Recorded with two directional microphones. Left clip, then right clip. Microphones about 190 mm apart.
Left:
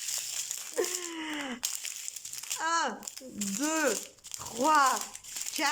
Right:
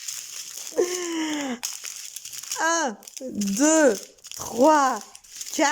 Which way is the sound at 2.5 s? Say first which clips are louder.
Right 6 dB; 30° right (ahead or behind).